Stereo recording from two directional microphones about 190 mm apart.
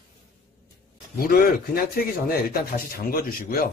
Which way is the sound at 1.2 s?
50° left (ahead or behind).